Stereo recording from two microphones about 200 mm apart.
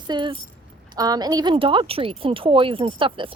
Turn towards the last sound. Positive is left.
turn(degrees=-25)  # may be behind; listen again after turning